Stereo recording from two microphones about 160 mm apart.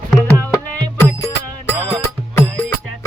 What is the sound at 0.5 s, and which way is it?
Music, 20° left (ahead or behind).